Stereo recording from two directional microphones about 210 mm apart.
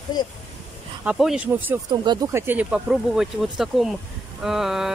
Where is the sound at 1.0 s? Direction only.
5° right (ahead or behind).